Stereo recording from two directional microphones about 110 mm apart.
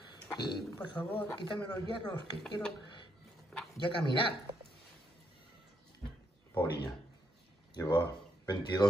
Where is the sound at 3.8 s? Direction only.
45° left (ahead or behind).